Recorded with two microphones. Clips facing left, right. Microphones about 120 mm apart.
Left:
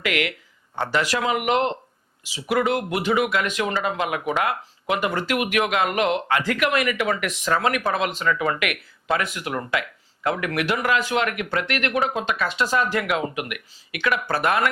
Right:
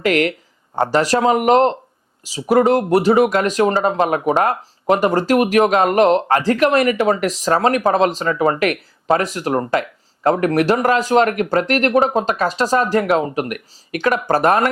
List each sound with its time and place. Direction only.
0.0 s speech: 40° right (ahead or behind)